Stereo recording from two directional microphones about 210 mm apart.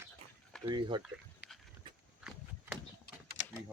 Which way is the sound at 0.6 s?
20° right (ahead or behind).